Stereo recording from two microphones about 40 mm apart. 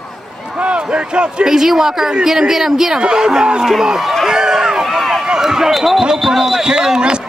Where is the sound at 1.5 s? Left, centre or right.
Centre.